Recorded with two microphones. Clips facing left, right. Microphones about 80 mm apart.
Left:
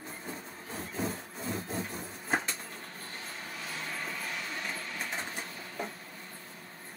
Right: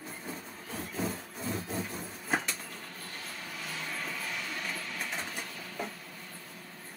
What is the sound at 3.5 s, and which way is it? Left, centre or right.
Vehicle, centre.